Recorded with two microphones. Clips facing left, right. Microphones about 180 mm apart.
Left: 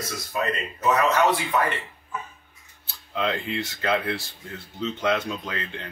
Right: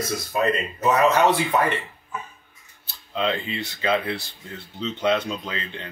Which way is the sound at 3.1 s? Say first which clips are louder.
Right 2 dB; 20° right (ahead or behind).